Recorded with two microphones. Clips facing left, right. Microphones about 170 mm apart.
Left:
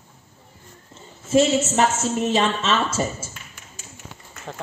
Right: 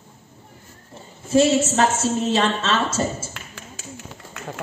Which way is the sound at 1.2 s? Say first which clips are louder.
Right 1 dB; 20° left (ahead or behind).